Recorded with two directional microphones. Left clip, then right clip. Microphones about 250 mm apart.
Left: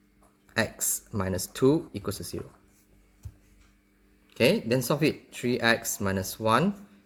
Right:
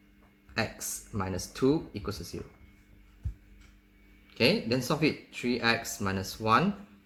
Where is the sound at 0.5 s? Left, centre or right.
Left.